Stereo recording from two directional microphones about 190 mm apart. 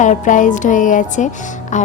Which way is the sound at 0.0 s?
40° left (ahead or behind).